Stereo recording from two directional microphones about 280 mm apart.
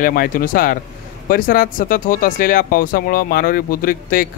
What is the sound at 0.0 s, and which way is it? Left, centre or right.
Speech, left.